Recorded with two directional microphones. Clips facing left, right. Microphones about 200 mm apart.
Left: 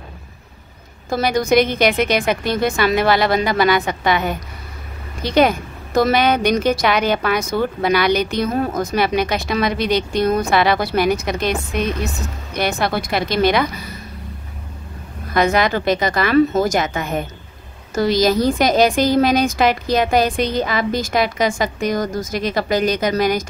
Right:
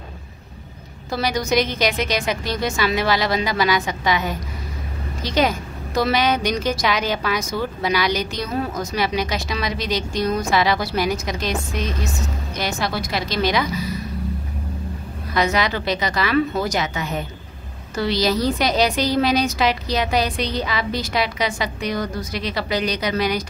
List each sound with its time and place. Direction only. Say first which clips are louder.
1.1 s a woman's voice: left 5 dB; 55° left (ahead or behind)
15.3 s a woman's voice: left 4 dB; 50° left (ahead or behind)